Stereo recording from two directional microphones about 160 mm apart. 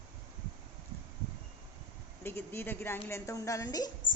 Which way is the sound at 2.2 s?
15° left (ahead or behind).